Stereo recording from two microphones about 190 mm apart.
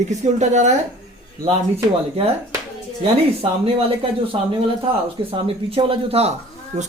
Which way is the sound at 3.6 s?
30° right (ahead or behind).